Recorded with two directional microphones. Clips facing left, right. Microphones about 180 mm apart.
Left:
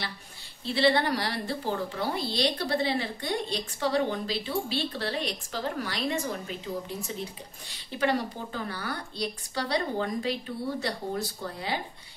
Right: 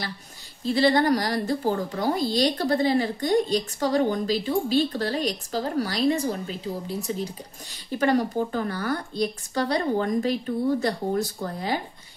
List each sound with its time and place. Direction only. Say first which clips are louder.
0.7 s a woman's voice: right 5 dB; 40° right (ahead or behind)